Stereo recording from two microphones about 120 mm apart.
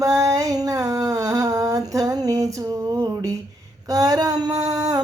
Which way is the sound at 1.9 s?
30° right (ahead or behind).